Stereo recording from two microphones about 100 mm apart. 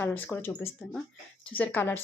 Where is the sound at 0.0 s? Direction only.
20° left (ahead or behind).